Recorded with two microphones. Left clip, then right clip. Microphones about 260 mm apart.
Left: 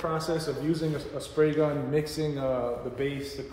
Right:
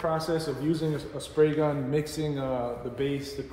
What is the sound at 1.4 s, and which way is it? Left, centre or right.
Speech, centre.